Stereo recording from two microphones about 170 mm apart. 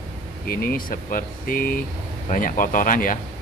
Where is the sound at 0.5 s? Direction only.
55° left (ahead or behind).